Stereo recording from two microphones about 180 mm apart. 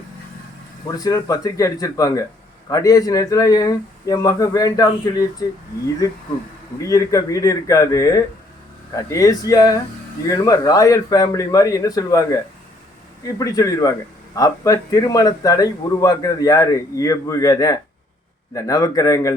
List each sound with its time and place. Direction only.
0.9 s speech: 20° left (ahead or behind)
6.8 s speech: 20° left (ahead or behind)